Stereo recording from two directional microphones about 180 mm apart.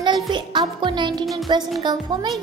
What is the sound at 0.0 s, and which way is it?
Music, 25° right (ahead or behind).